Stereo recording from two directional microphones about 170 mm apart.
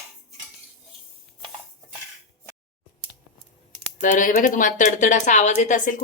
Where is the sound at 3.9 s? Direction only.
50° left (ahead or behind).